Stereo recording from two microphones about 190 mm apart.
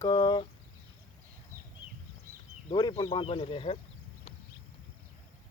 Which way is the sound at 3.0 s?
25° left (ahead or behind).